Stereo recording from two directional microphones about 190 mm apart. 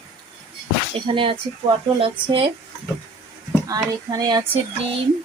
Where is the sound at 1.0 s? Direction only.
25° right (ahead or behind).